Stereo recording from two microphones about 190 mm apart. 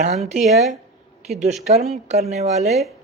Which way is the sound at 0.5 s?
35° right (ahead or behind).